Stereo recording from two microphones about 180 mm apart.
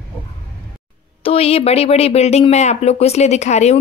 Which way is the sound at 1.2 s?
35° left (ahead or behind).